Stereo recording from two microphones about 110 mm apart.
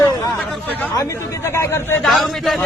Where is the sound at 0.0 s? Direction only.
35° left (ahead or behind).